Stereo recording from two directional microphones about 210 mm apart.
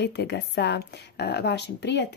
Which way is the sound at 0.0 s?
50° left (ahead or behind).